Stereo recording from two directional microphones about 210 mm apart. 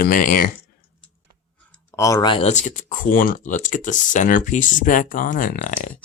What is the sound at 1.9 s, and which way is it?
Speech, 15° left (ahead or behind).